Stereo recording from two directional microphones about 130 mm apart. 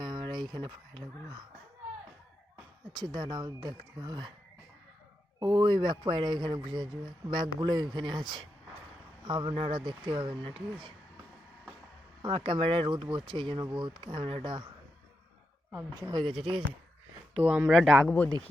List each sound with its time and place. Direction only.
0.0 s speech: 35° right (ahead or behind)
2.9 s speech: 35° right (ahead or behind)
5.4 s speech: 30° right (ahead or behind)
12.2 s speech: 40° right (ahead or behind)
16.0 s speech: 35° right (ahead or behind)
17.4 s speech: 10° right (ahead or behind)